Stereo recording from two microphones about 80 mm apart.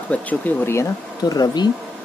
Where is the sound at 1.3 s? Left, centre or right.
Left.